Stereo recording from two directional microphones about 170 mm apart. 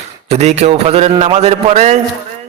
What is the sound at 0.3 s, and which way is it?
A man's voice, 40° right (ahead or behind).